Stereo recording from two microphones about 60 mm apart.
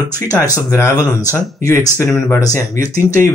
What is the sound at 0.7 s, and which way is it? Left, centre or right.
Speech, left.